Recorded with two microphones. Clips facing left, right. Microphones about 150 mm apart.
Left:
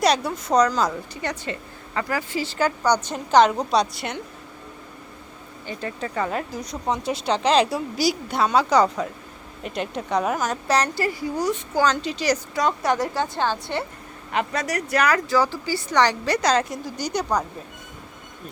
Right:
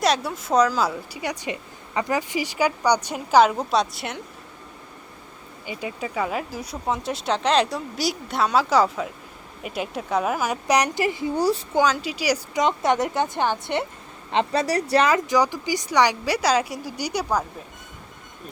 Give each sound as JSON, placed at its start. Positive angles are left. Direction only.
{"t": 0.0, "sound": "a woman's voice", "side_deg": 0}
{"t": 5.6, "sound": "a woman's voice", "side_deg": -10}
{"t": 11.8, "sound": "a woman's voice", "side_deg": -10}
{"t": 12.6, "sound": "a woman's voice", "side_deg": -20}